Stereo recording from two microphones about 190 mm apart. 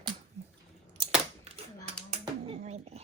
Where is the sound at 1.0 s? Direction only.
30° right (ahead or behind).